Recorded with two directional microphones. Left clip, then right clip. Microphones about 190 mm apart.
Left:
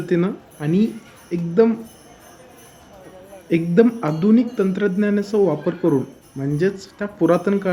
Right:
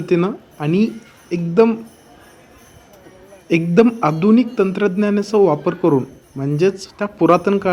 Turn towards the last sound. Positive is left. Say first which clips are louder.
# right 4 dB
turn(degrees=-10)  # may be behind; listen again after turning